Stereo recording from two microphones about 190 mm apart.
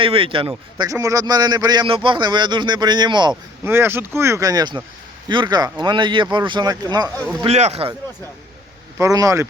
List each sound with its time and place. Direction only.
0.0 s a man's voice: 30° right (ahead or behind)
0.9 s a man's voice: 15° right (ahead or behind)
3.6 s a man's voice: 10° right (ahead or behind)
7.2 s speech: centre (ahead or behind)
7.4 s speech: 35° right (ahead or behind)
9.0 s speech: 20° right (ahead or behind)